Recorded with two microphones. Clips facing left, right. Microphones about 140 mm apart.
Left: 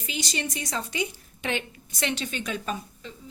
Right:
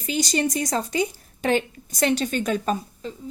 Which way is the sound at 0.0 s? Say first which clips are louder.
Right 9 dB; 40° right (ahead or behind).